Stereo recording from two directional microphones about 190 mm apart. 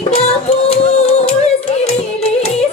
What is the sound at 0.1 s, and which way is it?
Music, 35° left (ahead or behind).